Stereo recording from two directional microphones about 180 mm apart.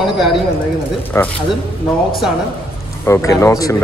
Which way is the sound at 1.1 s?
15° left (ahead or behind).